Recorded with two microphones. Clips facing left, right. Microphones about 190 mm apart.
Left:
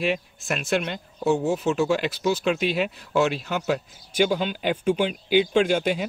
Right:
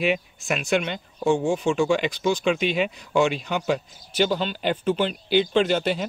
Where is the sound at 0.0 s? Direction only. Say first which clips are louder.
Right 2 dB; centre (ahead or behind).